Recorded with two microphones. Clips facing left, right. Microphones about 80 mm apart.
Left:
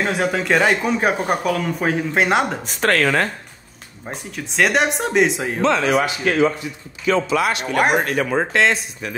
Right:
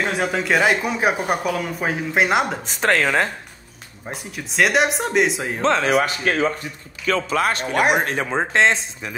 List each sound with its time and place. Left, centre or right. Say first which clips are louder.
0.0 s speech: left 2 dB; centre
2.6 s speech: left 1 dB; centre
4.0 s speech: left 1 dB; centre
5.6 s speech: left 1 dB; right
7.7 s speech: left 1 dB; left
8.0 s speech: left 2 dB; right